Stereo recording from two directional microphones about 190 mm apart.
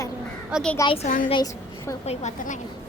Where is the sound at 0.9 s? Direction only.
35° left (ahead or behind).